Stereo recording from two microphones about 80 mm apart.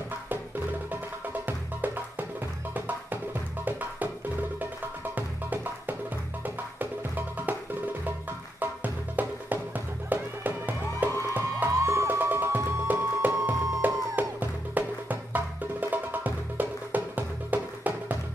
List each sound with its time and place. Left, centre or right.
1.4 s music: right
5.1 s music: right
8.5 s music: right
11.0 s music: right